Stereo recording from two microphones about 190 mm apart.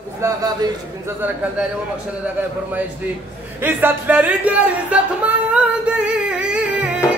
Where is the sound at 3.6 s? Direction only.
10° right (ahead or behind).